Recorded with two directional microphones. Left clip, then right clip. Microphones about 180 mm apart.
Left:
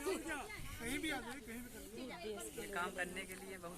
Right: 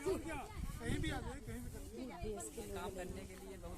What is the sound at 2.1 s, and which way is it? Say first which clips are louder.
Speech: even; 50° right (ahead or behind).